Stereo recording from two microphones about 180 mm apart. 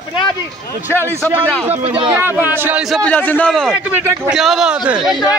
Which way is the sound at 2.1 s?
10° right (ahead or behind).